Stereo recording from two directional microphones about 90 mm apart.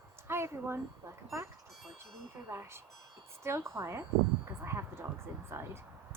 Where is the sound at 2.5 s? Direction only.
25° right (ahead or behind).